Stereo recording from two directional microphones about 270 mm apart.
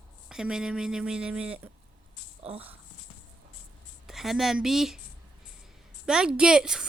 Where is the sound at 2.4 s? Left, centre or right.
Right.